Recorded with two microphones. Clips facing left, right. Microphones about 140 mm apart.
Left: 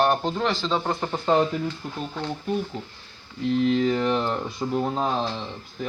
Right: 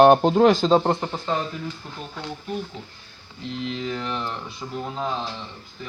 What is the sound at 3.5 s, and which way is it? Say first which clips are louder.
Speech: left 8 dB; 45° left (ahead or behind).